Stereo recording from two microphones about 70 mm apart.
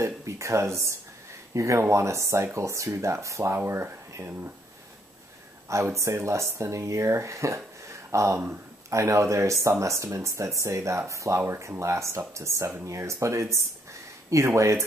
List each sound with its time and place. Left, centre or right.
0.0 s speech: right
5.7 s speech: right